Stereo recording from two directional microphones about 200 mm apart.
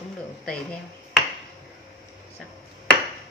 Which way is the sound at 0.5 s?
5° left (ahead or behind).